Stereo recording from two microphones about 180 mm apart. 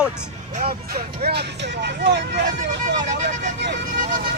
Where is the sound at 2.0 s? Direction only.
70° right (ahead or behind).